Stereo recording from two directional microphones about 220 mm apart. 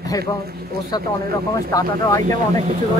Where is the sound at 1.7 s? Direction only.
15° left (ahead or behind).